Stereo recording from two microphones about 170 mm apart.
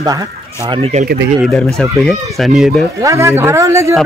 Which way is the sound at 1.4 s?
Centre (ahead or behind).